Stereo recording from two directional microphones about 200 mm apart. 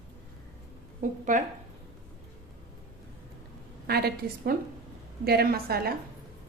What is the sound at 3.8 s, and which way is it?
A woman's voice, 50° right (ahead or behind).